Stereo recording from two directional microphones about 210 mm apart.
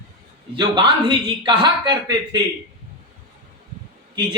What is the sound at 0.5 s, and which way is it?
A man's voice, 20° right (ahead or behind).